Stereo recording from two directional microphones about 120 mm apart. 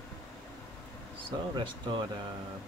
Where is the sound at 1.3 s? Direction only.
35° right (ahead or behind).